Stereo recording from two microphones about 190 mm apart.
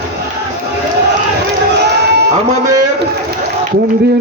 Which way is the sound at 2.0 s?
60° right (ahead or behind).